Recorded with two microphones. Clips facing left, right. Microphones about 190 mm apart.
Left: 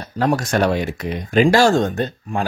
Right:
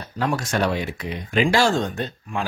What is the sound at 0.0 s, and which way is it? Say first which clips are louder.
Speech: left 5 dB; 40° left (ahead or behind).